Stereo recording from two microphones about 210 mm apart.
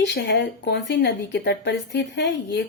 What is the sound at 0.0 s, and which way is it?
Speech, 50° left (ahead or behind).